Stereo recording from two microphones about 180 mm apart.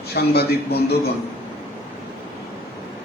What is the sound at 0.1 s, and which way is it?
Speech, 60° left (ahead or behind).